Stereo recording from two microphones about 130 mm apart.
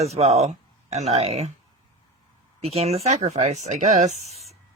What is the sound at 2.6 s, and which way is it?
A man's voice, 50° right (ahead or behind).